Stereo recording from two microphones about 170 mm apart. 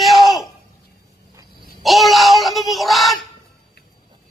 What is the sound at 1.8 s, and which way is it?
Child singing, centre (ahead or behind).